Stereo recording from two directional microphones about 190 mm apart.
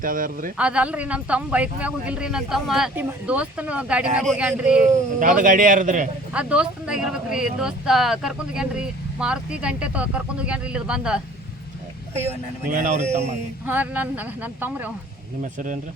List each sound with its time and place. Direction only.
0.0 s a man's voice: 45° right (ahead or behind)
0.5 s speech: 5° right (ahead or behind)
5.2 s a man's voice: 45° right (ahead or behind)
6.3 s speech: 5° right (ahead or behind)
12.1 s speech: 35° right (ahead or behind)
13.7 s speech: 10° right (ahead or behind)
15.5 s a man's voice: 40° right (ahead or behind)